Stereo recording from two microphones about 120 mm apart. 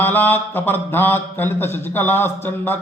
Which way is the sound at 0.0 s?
15° left (ahead or behind).